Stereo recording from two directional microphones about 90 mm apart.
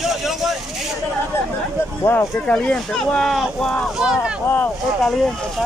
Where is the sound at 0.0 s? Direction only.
5° right (ahead or behind).